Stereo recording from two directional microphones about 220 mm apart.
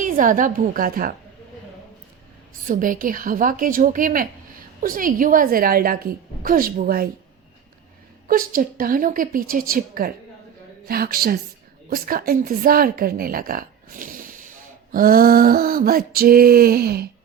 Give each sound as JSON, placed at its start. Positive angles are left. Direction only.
{"t": 0.0, "sound": "a woman's voice", "side_deg": -35}
{"t": 2.6, "sound": "a woman's voice", "side_deg": -35}
{"t": 8.3, "sound": "a woman's voice", "side_deg": -40}